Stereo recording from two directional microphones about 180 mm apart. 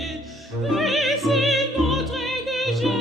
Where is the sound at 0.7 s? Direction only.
Centre (ahead or behind).